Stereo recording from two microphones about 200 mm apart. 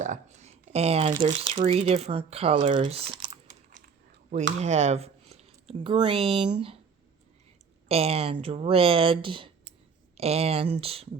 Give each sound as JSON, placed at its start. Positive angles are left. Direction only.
{"t": 0.0, "sound": "a sound", "side_deg": -35}
{"t": 1.1, "sound": "speech", "side_deg": -25}
{"t": 4.6, "sound": "speech", "side_deg": -35}
{"t": 7.9, "sound": "speech", "side_deg": -30}